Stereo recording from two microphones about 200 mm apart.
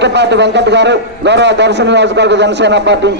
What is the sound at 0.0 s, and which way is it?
A man's voice, 60° right (ahead or behind).